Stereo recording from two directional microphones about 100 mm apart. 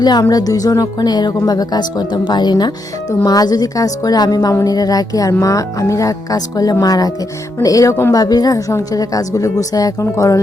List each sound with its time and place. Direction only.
0.0 s a woman's voice: 40° left (ahead or behind)
8.1 s a woman's voice: 40° left (ahead or behind)